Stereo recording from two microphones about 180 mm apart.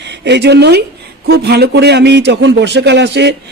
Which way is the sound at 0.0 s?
70° right (ahead or behind).